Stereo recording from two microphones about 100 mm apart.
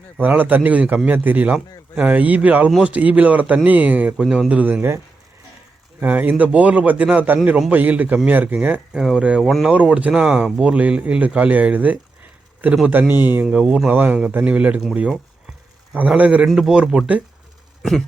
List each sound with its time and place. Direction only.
0.2 s speech: 20° right (ahead or behind)
6.0 s speech: 15° right (ahead or behind); by 9.7 s centre (ahead or behind)
9.7 s speech: 15° right (ahead or behind)
15.9 s speech: 15° right (ahead or behind)